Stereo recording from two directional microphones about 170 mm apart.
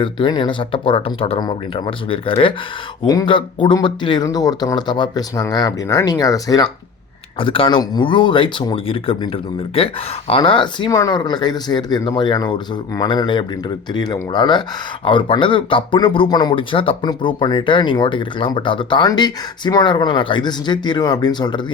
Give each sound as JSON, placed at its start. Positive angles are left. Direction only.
{"t": 0.0, "sound": "speech", "side_deg": 30}
{"t": 7.3, "sound": "speech", "side_deg": 30}